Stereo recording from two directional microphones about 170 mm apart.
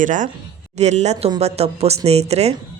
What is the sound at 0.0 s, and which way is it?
A woman's voice, 50° right (ahead or behind).